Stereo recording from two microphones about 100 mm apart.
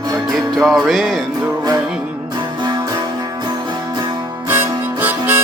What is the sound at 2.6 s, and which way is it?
Music, 40° right (ahead or behind).